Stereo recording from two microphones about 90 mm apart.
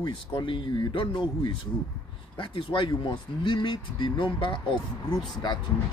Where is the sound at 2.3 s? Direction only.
70° left (ahead or behind).